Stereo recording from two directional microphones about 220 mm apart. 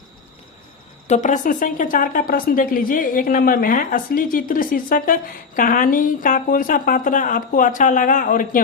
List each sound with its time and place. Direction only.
1.0 s a woman's voice: 30° left (ahead or behind)